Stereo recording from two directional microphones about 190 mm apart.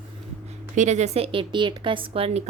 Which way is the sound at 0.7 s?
40° right (ahead or behind).